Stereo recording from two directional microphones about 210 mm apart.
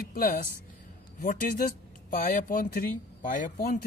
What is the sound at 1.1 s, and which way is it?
Speech, 40° left (ahead or behind).